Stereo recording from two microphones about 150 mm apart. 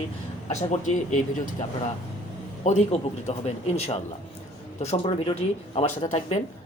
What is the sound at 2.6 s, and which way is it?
Speech, 50° left (ahead or behind).